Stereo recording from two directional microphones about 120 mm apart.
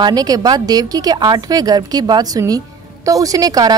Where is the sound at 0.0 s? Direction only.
35° right (ahead or behind).